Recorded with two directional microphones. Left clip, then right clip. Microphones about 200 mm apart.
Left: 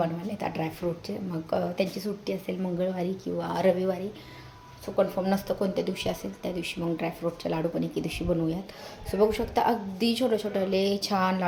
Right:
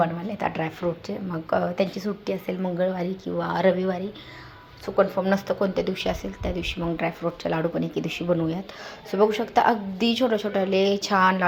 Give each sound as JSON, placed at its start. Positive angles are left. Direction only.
{"t": 0.0, "sound": "a woman's voice", "side_deg": -5}